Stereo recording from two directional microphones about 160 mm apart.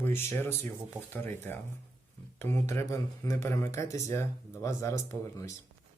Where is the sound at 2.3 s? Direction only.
15° left (ahead or behind).